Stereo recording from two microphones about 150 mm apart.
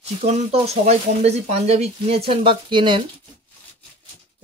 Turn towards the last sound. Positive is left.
turn(degrees=-30)  # may be behind; listen again after turning